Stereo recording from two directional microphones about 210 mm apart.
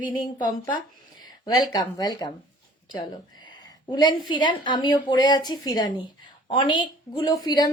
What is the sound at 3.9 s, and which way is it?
A woman's voice, 20° left (ahead or behind).